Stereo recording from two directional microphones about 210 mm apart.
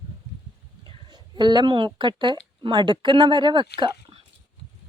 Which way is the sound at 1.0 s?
20° right (ahead or behind).